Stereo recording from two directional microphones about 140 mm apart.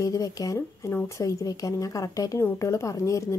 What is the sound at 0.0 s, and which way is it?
A woman's voice, 25° left (ahead or behind).